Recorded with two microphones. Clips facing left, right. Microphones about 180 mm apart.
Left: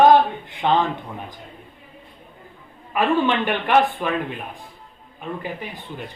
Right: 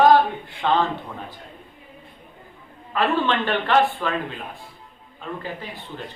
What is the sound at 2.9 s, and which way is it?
Speech, 15° left (ahead or behind).